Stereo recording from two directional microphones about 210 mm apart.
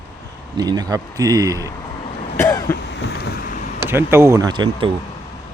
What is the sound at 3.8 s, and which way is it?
Speech, 10° right (ahead or behind).